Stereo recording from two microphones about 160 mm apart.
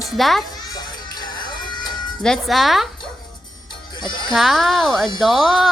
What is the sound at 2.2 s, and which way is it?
Speech, centre (ahead or behind).